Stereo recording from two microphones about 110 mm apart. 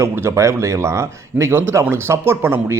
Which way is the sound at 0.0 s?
25° right (ahead or behind).